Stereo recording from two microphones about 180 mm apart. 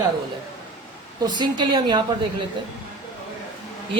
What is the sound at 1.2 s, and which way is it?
Speech, 25° right (ahead or behind).